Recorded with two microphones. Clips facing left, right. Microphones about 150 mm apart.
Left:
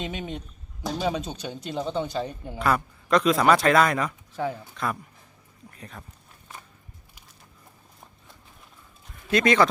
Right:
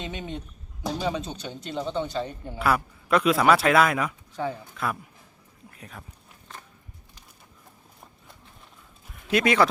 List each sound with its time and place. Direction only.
0.0 s speech: 20° left (ahead or behind)
2.6 s a man's voice: 5° right (ahead or behind)
9.3 s speech: 5° right (ahead or behind)